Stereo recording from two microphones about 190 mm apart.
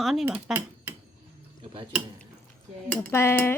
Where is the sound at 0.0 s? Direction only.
Centre (ahead or behind).